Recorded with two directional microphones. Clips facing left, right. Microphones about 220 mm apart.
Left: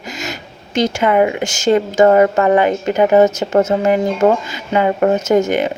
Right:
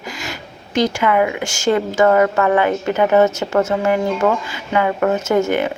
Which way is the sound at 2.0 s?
30° left (ahead or behind).